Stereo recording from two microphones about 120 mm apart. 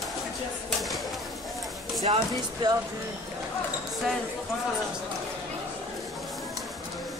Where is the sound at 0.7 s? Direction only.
Centre (ahead or behind).